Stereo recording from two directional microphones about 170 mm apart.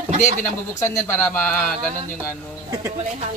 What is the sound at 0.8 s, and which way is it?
Speech, 15° left (ahead or behind).